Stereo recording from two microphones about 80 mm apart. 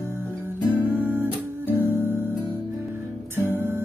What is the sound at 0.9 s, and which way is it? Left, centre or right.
Music, right.